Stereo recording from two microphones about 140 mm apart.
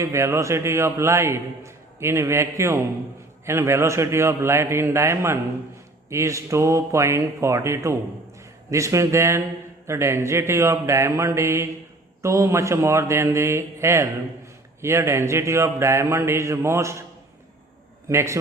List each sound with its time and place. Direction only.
0.0 s a man's voice: 20° right (ahead or behind)
18.1 s a man's voice: 20° right (ahead or behind)